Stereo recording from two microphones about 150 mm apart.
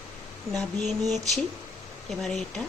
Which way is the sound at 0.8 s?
Centre (ahead or behind).